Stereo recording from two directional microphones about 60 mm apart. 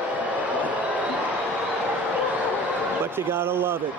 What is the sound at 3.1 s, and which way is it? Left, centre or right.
Speech, right.